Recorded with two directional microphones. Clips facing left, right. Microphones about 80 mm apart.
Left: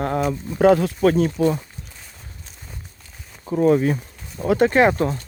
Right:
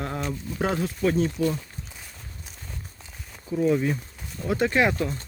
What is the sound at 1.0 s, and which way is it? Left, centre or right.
Speech, left.